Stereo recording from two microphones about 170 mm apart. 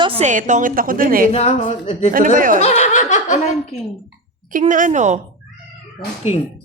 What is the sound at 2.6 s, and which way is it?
Laughter, 40° left (ahead or behind).